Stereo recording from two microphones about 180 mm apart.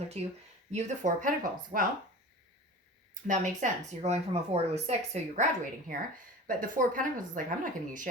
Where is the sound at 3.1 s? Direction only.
45° right (ahead or behind).